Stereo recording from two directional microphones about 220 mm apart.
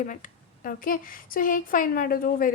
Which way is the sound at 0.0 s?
35° left (ahead or behind).